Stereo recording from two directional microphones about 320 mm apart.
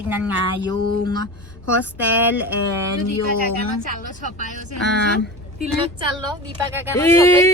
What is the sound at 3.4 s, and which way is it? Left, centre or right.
Speech, left.